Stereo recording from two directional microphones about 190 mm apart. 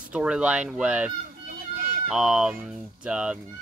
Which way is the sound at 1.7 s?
50° right (ahead or behind).